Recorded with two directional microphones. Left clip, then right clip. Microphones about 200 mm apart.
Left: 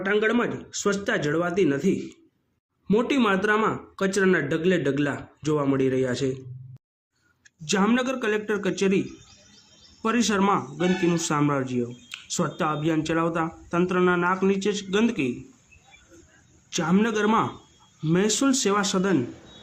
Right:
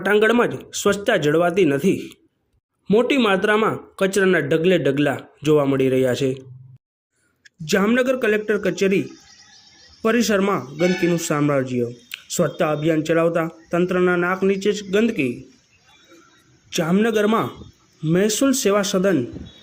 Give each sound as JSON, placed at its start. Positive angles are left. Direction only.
{"t": 0.0, "sound": "speech", "side_deg": -25}
{"t": 7.4, "sound": "speech", "side_deg": -15}
{"t": 16.6, "sound": "speech", "side_deg": -10}